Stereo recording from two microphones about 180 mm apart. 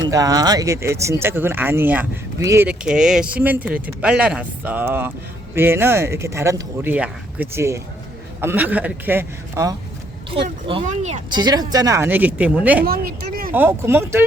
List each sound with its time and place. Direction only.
0.1 s speech: 20° right (ahead or behind)
2.6 s speech: 5° right (ahead or behind)
10.3 s speech: 30° right (ahead or behind)
10.8 s speech: 40° right (ahead or behind)
11.3 s speech: 25° right (ahead or behind); by 12.8 s 10° right (ahead or behind)
12.8 s speech: 55° right (ahead or behind)
13.5 s speech: 10° right (ahead or behind)